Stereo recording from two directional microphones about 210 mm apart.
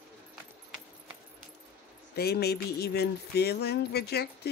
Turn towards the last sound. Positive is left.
turn(degrees=50)  # may be behind; listen again after turning